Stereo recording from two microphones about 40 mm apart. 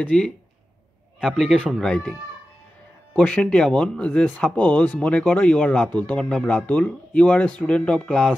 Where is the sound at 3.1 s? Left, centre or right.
Left.